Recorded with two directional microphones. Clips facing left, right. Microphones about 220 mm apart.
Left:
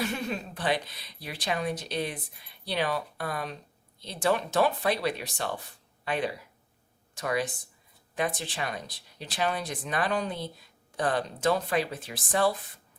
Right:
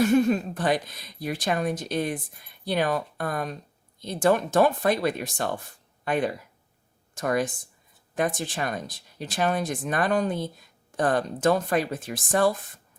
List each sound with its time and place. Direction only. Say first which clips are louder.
0.0 s a woman's voice: right 11 dB; 45° right (ahead or behind)